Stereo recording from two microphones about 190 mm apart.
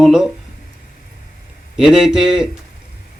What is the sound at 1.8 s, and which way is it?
Speech, 5° right (ahead or behind).